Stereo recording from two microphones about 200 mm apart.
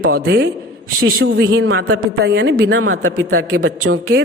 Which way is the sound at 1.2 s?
65° right (ahead or behind).